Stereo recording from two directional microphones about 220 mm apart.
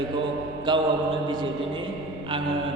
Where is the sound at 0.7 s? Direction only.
20° right (ahead or behind).